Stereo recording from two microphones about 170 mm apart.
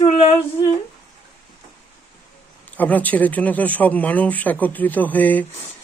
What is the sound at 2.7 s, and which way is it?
Speech, 10° left (ahead or behind).